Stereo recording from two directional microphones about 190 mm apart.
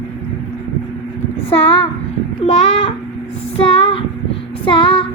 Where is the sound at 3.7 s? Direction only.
30° left (ahead or behind).